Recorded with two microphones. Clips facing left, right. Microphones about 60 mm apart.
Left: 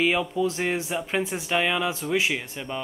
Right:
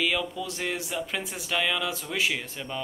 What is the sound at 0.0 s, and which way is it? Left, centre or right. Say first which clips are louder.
Speech: left 5 dB; left.